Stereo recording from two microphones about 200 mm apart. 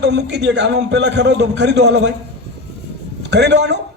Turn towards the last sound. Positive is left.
turn(degrees=-60)  # may be behind; listen again after turning